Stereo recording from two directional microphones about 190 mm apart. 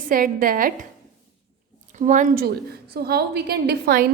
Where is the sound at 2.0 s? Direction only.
40° right (ahead or behind).